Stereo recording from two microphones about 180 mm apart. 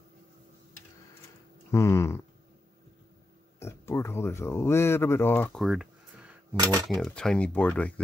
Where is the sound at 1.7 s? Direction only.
15° left (ahead or behind).